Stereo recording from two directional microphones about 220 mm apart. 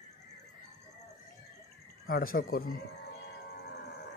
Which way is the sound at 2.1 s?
40° left (ahead or behind).